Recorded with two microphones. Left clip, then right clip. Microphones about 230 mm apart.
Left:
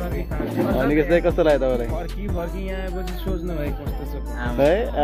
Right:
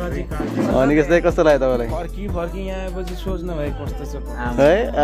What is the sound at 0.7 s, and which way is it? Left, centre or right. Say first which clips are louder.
Speech: right 4 dB; centre.